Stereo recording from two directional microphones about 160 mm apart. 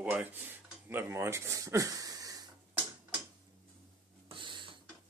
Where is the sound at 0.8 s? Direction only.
15° right (ahead or behind).